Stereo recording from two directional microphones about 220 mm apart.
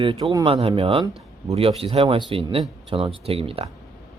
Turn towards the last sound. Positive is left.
turn(degrees=-25)  # may be behind; listen again after turning